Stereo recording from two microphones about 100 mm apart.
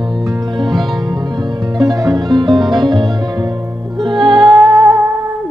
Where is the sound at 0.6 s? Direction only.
Centre (ahead or behind).